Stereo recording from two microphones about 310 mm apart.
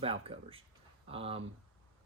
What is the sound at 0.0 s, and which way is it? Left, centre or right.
A man's voice, centre.